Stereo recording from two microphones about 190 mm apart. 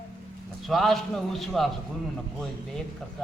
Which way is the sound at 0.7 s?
Centre (ahead or behind).